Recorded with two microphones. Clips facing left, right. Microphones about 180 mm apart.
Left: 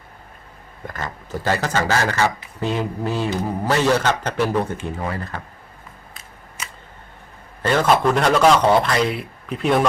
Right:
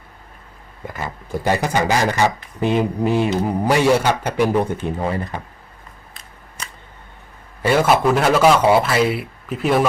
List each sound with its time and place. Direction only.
0.9 s speech: 10° right (ahead or behind)
7.6 s speech: 10° right (ahead or behind)